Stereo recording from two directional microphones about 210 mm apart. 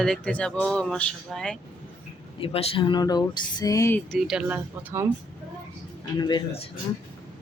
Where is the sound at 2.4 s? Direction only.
25° left (ahead or behind).